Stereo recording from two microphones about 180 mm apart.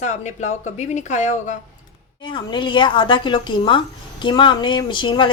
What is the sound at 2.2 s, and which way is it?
A woman's voice, 25° left (ahead or behind).